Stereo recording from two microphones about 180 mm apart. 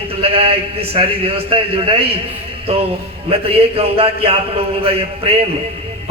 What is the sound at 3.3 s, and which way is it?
A man's voice, 30° right (ahead or behind).